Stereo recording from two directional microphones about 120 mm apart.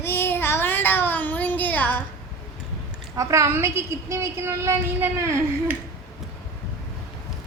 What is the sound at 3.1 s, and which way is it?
A woman's voice, 25° right (ahead or behind).